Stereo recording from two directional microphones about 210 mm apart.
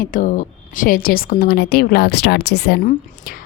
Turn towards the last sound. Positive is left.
turn(degrees=45)  # may be behind; listen again after turning